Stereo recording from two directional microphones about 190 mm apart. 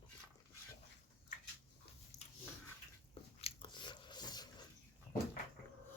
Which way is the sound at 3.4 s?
25° left (ahead or behind).